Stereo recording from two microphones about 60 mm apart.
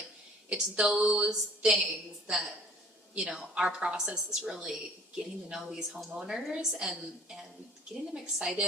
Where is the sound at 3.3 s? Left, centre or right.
Centre.